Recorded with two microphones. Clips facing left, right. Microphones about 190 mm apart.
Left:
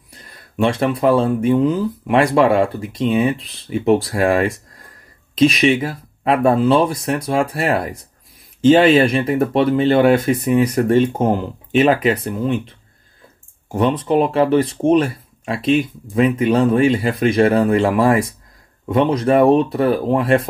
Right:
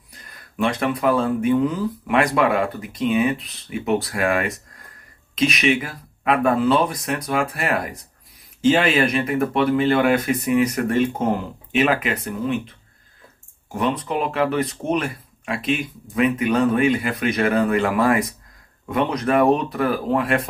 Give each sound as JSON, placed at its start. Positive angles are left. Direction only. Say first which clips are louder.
{"t": 0.2, "sound": "speech", "louder": "left 4 dB", "side_deg": 30}
{"t": 13.7, "sound": "speech", "louder": "left 7 dB", "side_deg": 30}